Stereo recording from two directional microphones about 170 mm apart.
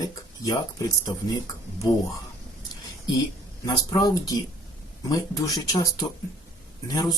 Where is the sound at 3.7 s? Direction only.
20° left (ahead or behind).